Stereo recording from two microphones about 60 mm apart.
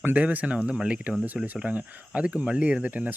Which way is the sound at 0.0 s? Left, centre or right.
Right.